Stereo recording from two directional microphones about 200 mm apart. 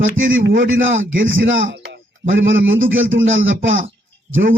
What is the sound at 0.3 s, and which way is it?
A man's voice, 70° right (ahead or behind).